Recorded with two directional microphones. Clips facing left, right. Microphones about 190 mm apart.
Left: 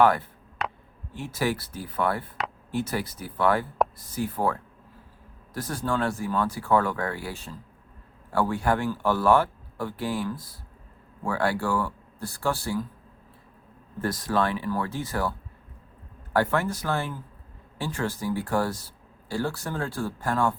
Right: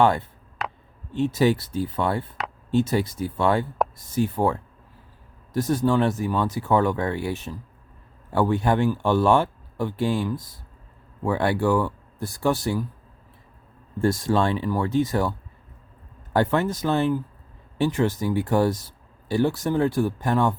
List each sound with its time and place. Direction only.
0.0 s speech: 25° right (ahead or behind)
0.6 s a sound: centre (ahead or behind)
1.1 s speech: 25° right (ahead or behind)
5.5 s speech: 25° right (ahead or behind)
14.0 s speech: 25° right (ahead or behind)